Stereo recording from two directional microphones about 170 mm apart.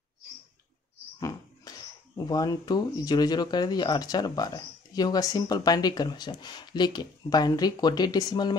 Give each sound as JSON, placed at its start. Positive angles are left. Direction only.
{"t": 2.1, "sound": "speech", "side_deg": 20}